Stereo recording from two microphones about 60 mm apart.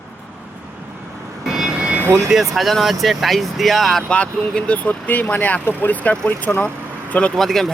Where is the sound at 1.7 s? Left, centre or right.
Right.